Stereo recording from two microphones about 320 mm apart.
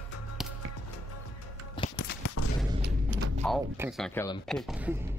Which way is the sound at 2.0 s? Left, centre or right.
Left.